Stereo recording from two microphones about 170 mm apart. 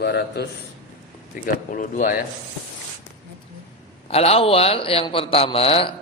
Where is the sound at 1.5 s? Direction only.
50° left (ahead or behind).